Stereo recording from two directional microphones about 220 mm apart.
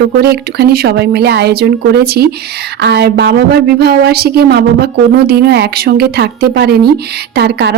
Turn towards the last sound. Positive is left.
turn(degrees=-50)  # may be behind; listen again after turning